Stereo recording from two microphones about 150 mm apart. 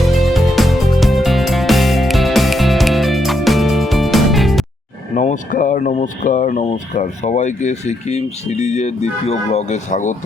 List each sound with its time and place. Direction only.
0.0 s music: centre (ahead or behind)
5.1 s speech: 60° left (ahead or behind)